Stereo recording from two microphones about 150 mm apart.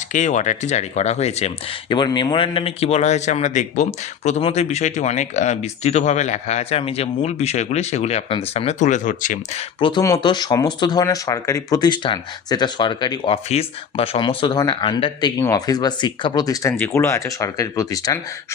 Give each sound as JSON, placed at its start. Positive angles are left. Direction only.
{"t": 0.1, "sound": "speech", "side_deg": 55}
{"t": 2.0, "sound": "speech", "side_deg": 30}
{"t": 9.6, "sound": "a man's voice", "side_deg": 35}